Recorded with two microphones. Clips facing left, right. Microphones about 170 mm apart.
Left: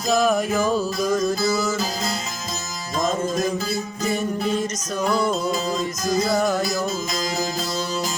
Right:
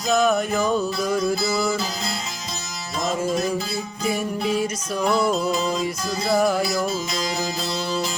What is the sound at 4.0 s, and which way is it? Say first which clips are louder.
Music: even; 5° right (ahead or behind).